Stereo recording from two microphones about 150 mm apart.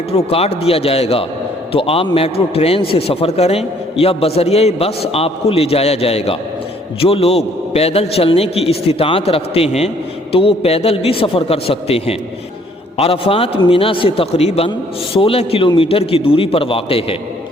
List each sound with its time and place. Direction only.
0.1 s a man's voice: 45° left (ahead or behind)